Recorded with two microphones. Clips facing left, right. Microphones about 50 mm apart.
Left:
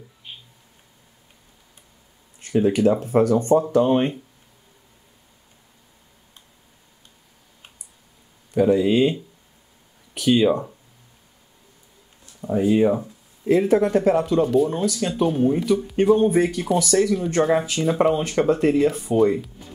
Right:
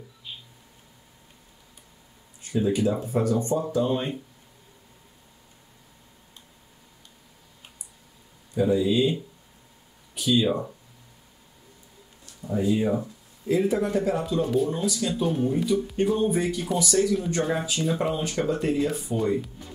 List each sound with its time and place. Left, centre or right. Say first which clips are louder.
2.4 s speech: left 6 dB; left
8.5 s speech: left 5 dB; left
10.1 s speech: left 5 dB; left
12.4 s speech: left 6 dB; left
17.8 s speech: left 5 dB; centre
18.1 s speech: left 6 dB; left